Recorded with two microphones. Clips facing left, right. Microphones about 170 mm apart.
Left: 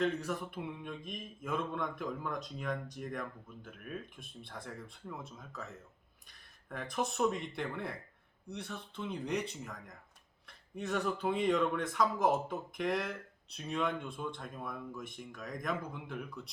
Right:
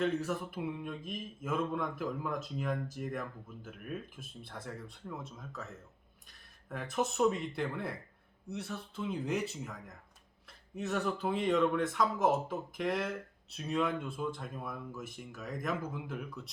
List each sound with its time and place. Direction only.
0.0 s speech: centre (ahead or behind)